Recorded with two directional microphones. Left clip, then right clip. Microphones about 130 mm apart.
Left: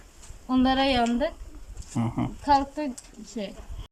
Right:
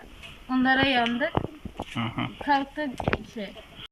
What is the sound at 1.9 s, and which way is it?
Speech, 35° left (ahead or behind).